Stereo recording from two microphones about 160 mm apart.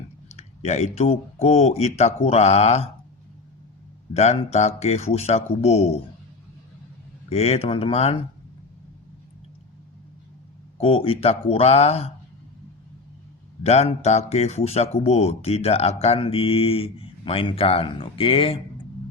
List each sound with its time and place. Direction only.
0.3 s speech: 45° left (ahead or behind)
4.1 s speech: 40° left (ahead or behind)
7.3 s speech: 40° left (ahead or behind)
10.8 s speech: 35° left (ahead or behind)
13.6 s speech: 40° left (ahead or behind)